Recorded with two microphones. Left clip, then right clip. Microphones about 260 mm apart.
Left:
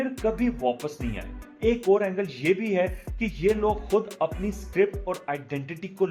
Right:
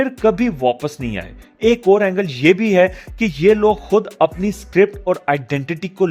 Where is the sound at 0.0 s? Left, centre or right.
Right.